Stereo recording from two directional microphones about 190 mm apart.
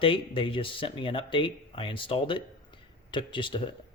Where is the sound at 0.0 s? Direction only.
25° left (ahead or behind).